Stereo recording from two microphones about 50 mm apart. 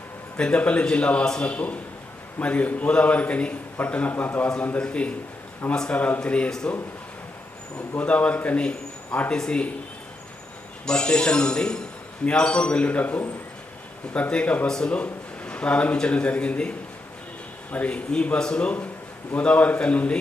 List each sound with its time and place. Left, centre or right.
0.3 s a man's voice: left
1.2 s a man's voice: centre
1.5 s a man's voice: left
4.8 s a man's voice: left
7.9 s a man's voice: left
10.8 s a man's voice: centre
14.7 s a man's voice: centre
14.9 s a man's voice: left